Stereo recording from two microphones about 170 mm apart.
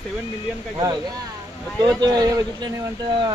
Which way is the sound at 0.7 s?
25° right (ahead or behind).